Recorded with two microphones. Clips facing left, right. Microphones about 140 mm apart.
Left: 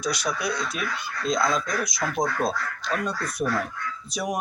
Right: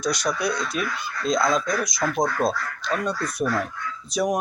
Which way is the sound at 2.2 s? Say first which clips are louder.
Right 2 dB; 20° right (ahead or behind).